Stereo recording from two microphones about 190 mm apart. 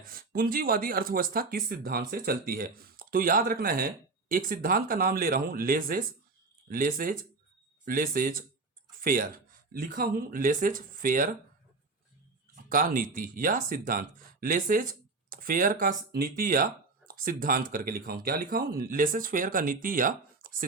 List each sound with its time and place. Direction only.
0.0 s speech: 50° right (ahead or behind)
12.6 s speech: 45° right (ahead or behind)